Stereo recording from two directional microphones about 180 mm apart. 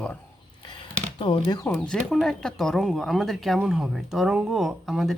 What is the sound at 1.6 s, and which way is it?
A woman's voice, 10° left (ahead or behind).